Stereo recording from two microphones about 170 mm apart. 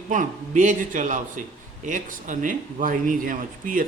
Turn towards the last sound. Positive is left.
turn(degrees=-50)  # may be behind; listen again after turning